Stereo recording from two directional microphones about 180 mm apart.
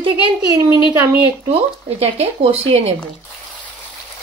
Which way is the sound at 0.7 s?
15° right (ahead or behind).